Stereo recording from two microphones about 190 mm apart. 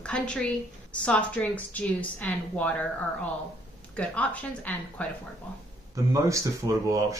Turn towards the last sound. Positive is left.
turn(degrees=-15)  # may be behind; listen again after turning